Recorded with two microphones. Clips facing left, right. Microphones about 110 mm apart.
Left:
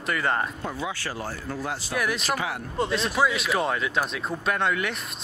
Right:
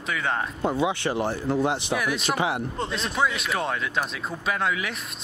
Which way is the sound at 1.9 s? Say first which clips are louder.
Right 1 dB; centre (ahead or behind).